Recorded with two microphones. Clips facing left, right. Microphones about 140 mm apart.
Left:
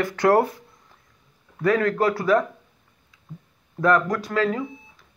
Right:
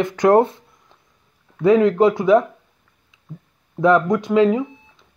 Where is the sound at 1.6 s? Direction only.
20° right (ahead or behind).